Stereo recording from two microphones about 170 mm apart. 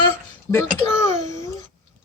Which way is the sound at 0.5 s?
15° left (ahead or behind).